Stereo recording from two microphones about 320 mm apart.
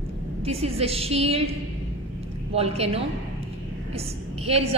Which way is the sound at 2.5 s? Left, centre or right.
Centre.